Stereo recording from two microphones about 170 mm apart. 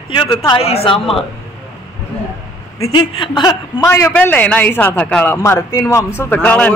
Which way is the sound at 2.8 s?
25° left (ahead or behind).